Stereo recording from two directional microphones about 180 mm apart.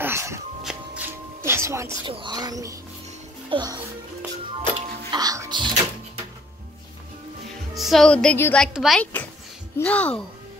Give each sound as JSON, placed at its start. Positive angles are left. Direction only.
{"t": 0.0, "sound": "music", "side_deg": -15}
{"t": 2.0, "sound": "a child's voice", "side_deg": -25}
{"t": 7.7, "sound": "music", "side_deg": 0}
{"t": 8.7, "sound": "speech", "side_deg": 0}
{"t": 9.0, "sound": "speech", "side_deg": 10}